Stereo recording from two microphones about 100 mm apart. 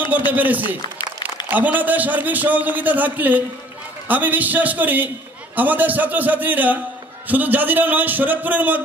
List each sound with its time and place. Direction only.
0.3 s a man's voice: 15° right (ahead or behind)